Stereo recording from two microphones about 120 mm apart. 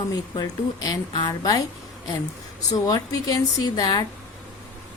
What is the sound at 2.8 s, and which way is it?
A woman's voice, 30° left (ahead or behind).